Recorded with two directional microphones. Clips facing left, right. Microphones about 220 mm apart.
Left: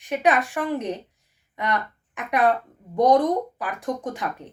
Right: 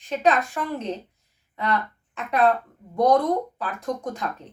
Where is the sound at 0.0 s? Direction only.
15° left (ahead or behind).